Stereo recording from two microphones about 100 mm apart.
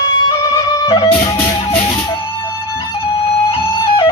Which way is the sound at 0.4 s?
40° left (ahead or behind).